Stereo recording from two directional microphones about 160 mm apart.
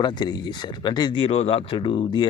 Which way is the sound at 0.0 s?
25° left (ahead or behind).